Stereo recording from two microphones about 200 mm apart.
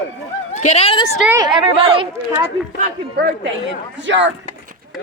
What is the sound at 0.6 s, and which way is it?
Speech, 30° left (ahead or behind).